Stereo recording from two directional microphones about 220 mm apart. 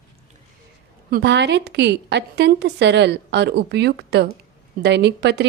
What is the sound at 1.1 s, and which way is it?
A woman's voice, 50° right (ahead or behind).